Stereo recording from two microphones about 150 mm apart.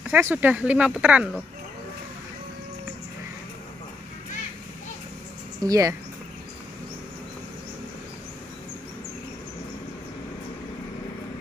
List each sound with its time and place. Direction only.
0.0 s speech: 15° right (ahead or behind)
5.6 s speech: 25° right (ahead or behind)